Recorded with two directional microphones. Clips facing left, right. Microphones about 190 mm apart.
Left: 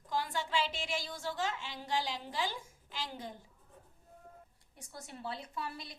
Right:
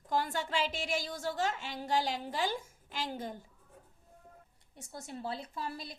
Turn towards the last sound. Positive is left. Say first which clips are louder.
# right 2 dB
turn(degrees=-30)  # may be behind; listen again after turning